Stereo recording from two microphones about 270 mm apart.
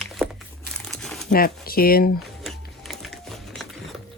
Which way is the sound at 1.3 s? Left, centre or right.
Left.